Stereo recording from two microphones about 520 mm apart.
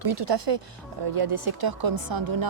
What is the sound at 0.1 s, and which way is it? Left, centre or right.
Speech, right.